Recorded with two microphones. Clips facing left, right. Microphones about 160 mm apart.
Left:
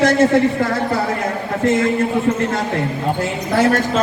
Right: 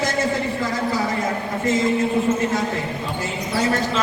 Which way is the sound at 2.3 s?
80° left.